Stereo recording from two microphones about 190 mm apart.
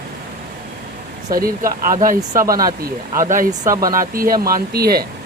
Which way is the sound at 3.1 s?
45° right (ahead or behind).